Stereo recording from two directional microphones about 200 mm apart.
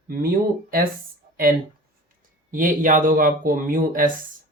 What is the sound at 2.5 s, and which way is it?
Speech, 40° right (ahead or behind).